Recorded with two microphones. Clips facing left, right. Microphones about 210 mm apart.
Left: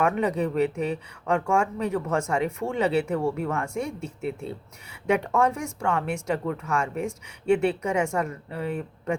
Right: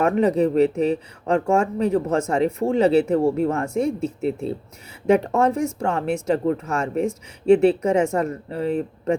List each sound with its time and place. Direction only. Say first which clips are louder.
0.0 s speech: right 6 dB; 40° right (ahead or behind)